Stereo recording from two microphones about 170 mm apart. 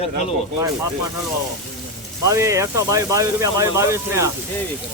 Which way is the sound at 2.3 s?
15° right (ahead or behind).